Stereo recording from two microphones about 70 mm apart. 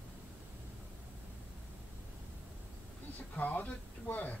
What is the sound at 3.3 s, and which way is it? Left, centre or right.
Speech, left.